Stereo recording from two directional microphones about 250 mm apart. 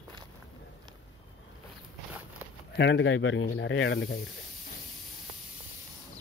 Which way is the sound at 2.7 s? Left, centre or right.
Left.